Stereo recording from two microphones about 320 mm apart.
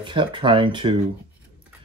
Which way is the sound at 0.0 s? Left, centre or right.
Centre.